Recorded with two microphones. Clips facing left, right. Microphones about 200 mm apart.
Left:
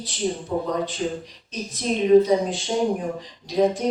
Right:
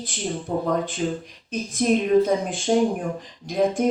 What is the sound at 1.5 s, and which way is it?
Speech, 50° right (ahead or behind).